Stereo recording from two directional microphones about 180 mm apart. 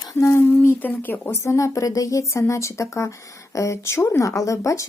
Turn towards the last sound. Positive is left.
turn(degrees=15)  # may be behind; listen again after turning